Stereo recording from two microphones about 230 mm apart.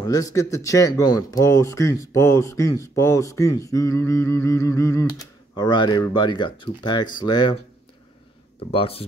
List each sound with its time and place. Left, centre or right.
0.0 s speech: centre
8.7 s speech: left